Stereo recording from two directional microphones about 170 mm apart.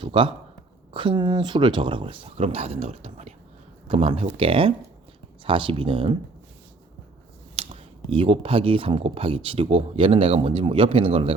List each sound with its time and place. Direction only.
0.0 s speech: 30° right (ahead or behind)
7.5 s speech: 35° right (ahead or behind)